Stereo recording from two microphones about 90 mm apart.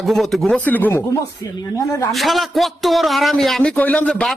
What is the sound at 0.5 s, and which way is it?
Speech, 20° left (ahead or behind).